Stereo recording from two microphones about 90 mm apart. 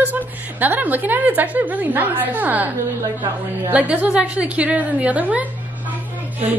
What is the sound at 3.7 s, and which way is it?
A woman's voice, 15° right (ahead or behind).